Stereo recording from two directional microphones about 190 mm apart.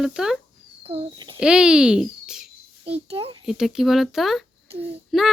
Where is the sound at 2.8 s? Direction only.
30° right (ahead or behind).